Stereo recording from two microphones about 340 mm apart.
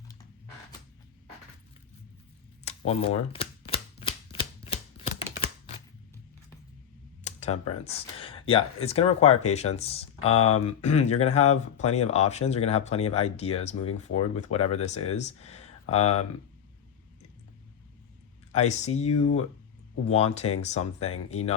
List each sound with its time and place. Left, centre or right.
2.6 s typewriter: centre
7.3 s computer keyboard: centre
7.9 s speech: centre
10.3 s speech: left
10.8 s speech: centre
18.5 s speech: centre